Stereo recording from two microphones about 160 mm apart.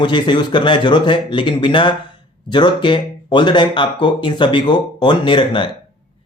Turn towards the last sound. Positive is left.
turn(degrees=30)  # may be behind; listen again after turning